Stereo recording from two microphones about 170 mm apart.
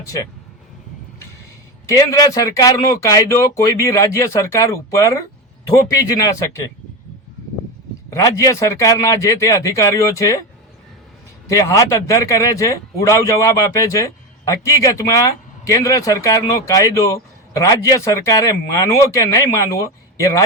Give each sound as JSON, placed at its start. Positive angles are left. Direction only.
{"t": 0.0, "sound": "speech", "side_deg": 20}
{"t": 1.9, "sound": "speech", "side_deg": 20}
{"t": 8.1, "sound": "speech", "side_deg": 20}
{"t": 11.4, "sound": "speech", "side_deg": 20}